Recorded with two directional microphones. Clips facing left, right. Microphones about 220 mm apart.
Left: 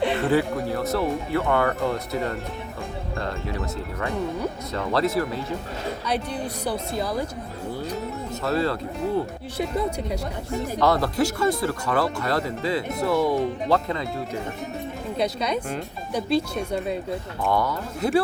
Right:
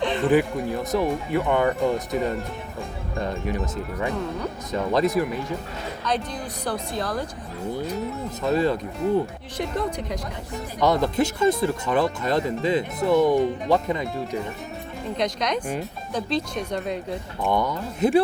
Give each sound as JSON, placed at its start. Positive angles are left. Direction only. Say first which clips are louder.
{"t": 0.3, "sound": "speech", "louder": "right 2 dB", "side_deg": -15}
{"t": 4.7, "sound": "speech", "louder": "right 3 dB", "side_deg": -15}
{"t": 6.1, "sound": "speech", "louder": "right 1 dB", "side_deg": 10}
{"t": 8.4, "sound": "speech", "louder": "right 3 dB", "side_deg": -15}
{"t": 9.6, "sound": "speech", "louder": "left 1 dB", "side_deg": 5}
{"t": 10.8, "sound": "speech", "louder": "right 1 dB", "side_deg": -15}
{"t": 15.1, "sound": "speech", "louder": "even", "side_deg": 5}
{"t": 17.4, "sound": "speech", "louder": "right 1 dB", "side_deg": -20}